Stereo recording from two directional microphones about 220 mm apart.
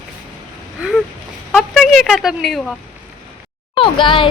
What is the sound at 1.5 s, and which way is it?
Speech, centre (ahead or behind).